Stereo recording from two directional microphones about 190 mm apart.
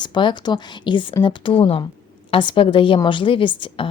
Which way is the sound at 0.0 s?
25° left (ahead or behind).